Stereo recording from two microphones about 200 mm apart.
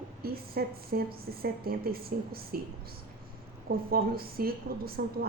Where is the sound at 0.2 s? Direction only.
50° right (ahead or behind).